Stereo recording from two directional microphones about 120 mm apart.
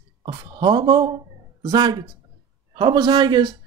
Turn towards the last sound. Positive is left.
turn(degrees=-35)  # may be behind; listen again after turning